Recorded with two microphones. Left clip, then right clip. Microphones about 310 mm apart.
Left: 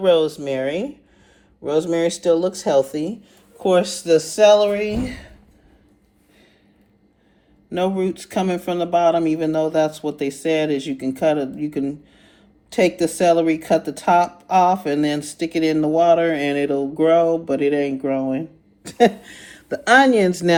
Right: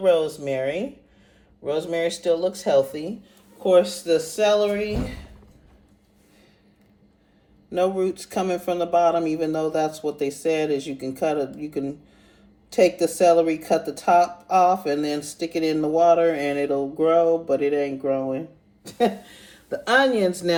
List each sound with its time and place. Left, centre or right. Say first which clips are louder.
0.0 s speech: left 3 dB; left
7.9 s speech: left 2 dB; left